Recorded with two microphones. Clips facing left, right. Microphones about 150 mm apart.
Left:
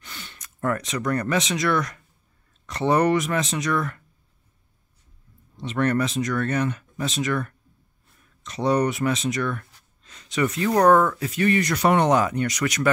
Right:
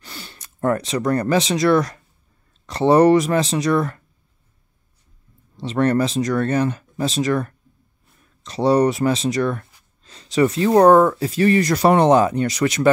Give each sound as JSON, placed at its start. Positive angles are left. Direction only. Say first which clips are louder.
{"t": 0.0, "sound": "speech", "louder": "right 4 dB", "side_deg": -35}
{"t": 5.6, "sound": "speech", "louder": "right 4 dB", "side_deg": -35}